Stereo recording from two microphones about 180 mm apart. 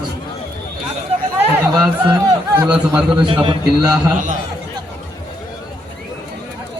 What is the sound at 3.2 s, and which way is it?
Speech, 25° right (ahead or behind).